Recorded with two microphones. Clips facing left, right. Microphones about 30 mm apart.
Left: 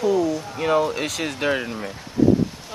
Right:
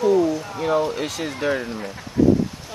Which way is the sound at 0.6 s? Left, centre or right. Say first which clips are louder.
Left 2 dB; left.